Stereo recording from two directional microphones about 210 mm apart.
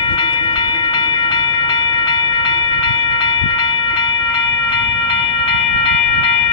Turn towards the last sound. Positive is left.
turn(degrees=25)  # may be behind; listen again after turning